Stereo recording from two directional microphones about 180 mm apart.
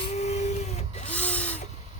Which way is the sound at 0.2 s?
40° left (ahead or behind).